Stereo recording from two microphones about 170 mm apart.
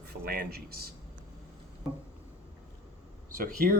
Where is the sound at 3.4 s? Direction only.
60° right (ahead or behind).